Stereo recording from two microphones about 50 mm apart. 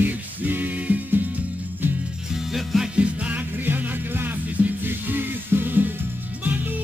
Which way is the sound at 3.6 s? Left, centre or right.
Right.